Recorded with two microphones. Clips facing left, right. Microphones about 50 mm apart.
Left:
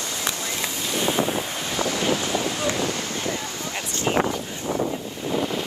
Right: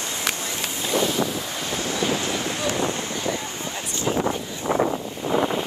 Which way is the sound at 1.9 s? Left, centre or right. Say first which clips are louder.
Even; right.